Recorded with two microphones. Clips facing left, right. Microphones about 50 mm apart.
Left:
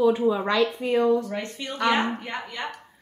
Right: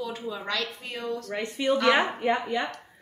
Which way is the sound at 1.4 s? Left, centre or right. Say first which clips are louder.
Right 3 dB; centre.